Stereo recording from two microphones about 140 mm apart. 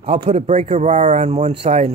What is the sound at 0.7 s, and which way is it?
Speech, 45° right (ahead or behind).